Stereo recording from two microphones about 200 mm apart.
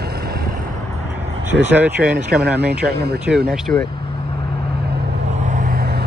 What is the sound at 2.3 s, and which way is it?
Speech, 55° right (ahead or behind).